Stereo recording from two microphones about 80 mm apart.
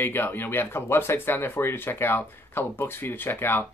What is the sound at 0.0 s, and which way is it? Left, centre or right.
Speech, left.